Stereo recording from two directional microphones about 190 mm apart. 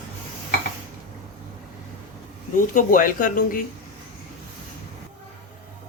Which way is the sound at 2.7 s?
45° left (ahead or behind).